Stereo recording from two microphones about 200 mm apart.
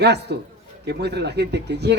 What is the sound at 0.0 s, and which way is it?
Speech, 55° right (ahead or behind).